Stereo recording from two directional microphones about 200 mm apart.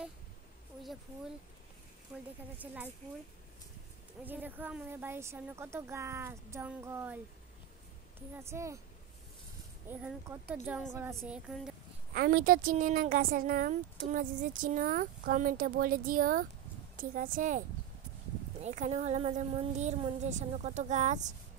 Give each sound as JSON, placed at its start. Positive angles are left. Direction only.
{"t": 2.1, "sound": "a woman's voice", "side_deg": -10}
{"t": 4.2, "sound": "a woman's voice", "side_deg": -10}
{"t": 8.4, "sound": "a woman's voice", "side_deg": -15}
{"t": 9.8, "sound": "a woman's voice", "side_deg": -10}
{"t": 12.1, "sound": "a woman's voice", "side_deg": -50}